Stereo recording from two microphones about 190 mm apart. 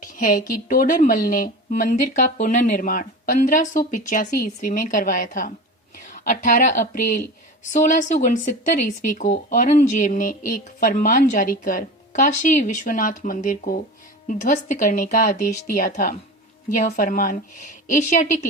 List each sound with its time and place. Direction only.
0.0 s speech: 45° left (ahead or behind)